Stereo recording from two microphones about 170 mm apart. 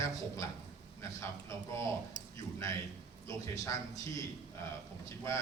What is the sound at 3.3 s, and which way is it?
Speech, 20° left (ahead or behind).